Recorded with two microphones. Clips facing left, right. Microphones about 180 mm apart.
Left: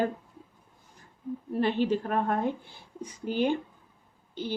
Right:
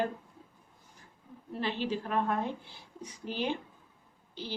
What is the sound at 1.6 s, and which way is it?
A woman's voice, 55° left (ahead or behind).